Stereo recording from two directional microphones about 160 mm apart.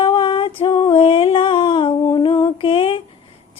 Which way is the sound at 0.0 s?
30° left (ahead or behind).